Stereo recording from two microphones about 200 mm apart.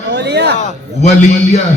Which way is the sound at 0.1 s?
60° right (ahead or behind).